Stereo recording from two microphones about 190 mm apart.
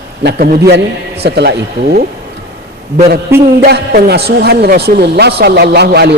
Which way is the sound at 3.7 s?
60° right (ahead or behind).